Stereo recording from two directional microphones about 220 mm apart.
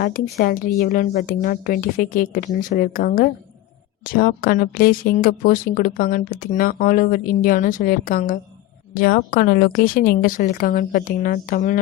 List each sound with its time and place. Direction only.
0.0 s speech: 40° left (ahead or behind)